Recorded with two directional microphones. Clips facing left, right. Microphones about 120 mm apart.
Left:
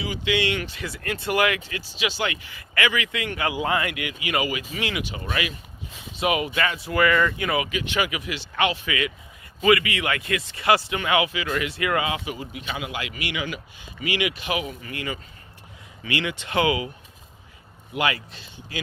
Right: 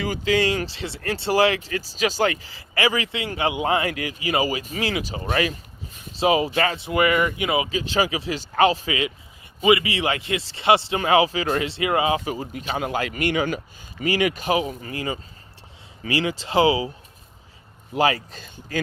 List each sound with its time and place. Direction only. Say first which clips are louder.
0.0 s speech: right 4 dB; 45° right (ahead or behind)
6.1 s speech: right 4 dB; 30° right (ahead or behind)
17.9 s speech: right 5 dB; 35° right (ahead or behind)